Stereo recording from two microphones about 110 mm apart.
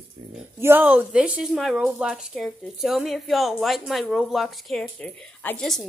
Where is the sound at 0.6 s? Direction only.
20° right (ahead or behind).